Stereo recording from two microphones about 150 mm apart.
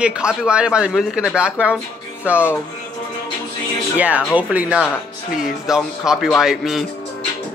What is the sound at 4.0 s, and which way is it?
A man's voice, 10° right (ahead or behind).